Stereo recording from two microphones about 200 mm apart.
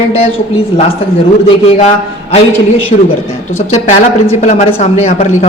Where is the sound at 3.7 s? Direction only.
35° left (ahead or behind).